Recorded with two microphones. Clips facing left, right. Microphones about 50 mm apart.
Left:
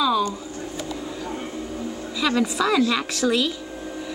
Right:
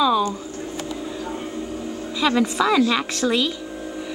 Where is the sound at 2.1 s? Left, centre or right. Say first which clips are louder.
Right 2 dB; centre.